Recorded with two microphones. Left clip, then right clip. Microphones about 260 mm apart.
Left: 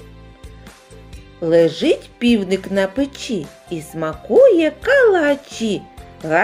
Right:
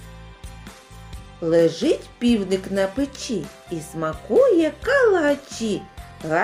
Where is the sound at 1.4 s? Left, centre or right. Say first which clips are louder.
Left 4 dB; left.